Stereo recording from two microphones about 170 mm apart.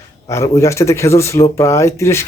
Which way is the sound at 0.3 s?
15° left (ahead or behind).